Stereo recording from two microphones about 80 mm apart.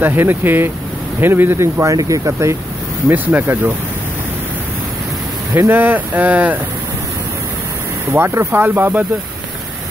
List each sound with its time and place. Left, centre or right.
0.0 s speech: right
3.1 s speech: right
5.5 s speech: right
8.1 s speech: right